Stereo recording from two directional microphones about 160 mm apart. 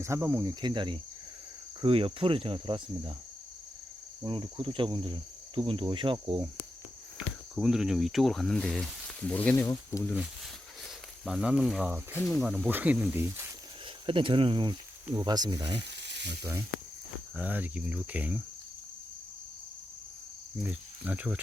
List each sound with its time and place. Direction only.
0.0 s speech: 20° right (ahead or behind)
1.8 s cricket: 35° right (ahead or behind)
4.2 s cricket: 30° right (ahead or behind)
7.2 s speech: 5° right (ahead or behind); by 10.2 s 15° left (ahead or behind)
11.3 s speech: 5° right (ahead or behind)
12.2 s speech: centre (ahead or behind); by 13.5 s 15° right (ahead or behind)
14.1 s cricket: 30° right (ahead or behind)
15.1 s speech: 25° right (ahead or behind)
15.8 s frying: 90° right
16.4 s speech: 15° right (ahead or behind)
20.7 s speech: 10° right (ahead or behind)